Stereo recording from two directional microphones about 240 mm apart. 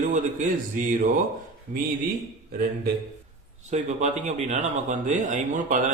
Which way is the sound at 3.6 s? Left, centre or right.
Right.